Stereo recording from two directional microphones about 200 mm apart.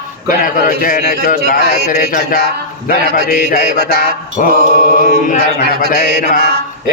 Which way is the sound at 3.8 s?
50° right (ahead or behind).